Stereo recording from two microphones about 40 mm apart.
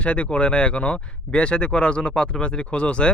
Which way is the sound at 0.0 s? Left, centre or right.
Left.